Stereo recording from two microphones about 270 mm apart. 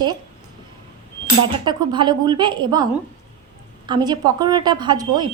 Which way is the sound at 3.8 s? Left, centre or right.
Centre.